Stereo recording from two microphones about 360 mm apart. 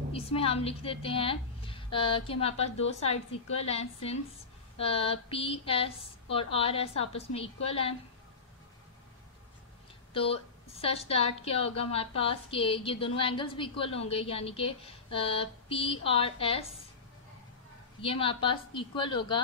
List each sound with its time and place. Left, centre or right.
0.1 s a woman's voice: centre
10.1 s a woman's voice: centre
18.0 s a woman's voice: centre